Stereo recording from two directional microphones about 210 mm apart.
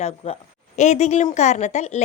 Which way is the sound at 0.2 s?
30° left (ahead or behind).